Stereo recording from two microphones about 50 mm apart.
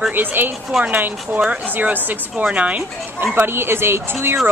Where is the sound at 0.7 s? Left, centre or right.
Centre.